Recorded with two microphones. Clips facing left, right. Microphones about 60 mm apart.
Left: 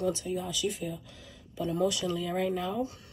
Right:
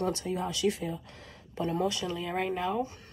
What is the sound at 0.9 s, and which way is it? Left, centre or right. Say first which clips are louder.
Speech: right 2 dB; right.